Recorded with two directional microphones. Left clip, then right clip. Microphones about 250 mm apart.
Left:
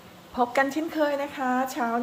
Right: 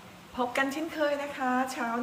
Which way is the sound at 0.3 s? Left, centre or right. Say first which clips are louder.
Left 5 dB; left.